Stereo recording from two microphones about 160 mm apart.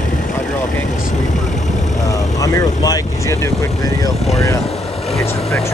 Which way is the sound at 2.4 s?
20° left (ahead or behind).